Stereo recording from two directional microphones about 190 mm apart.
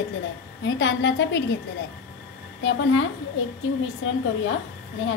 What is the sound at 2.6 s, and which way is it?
A woman's voice, 85° left.